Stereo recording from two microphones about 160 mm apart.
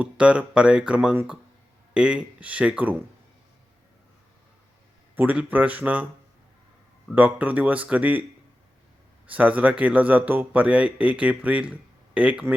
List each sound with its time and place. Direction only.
0.0 s a man's voice: 5° right (ahead or behind)
5.1 s a man's voice: 10° right (ahead or behind)
7.1 s a man's voice: 10° right (ahead or behind)
9.3 s a man's voice: 10° right (ahead or behind)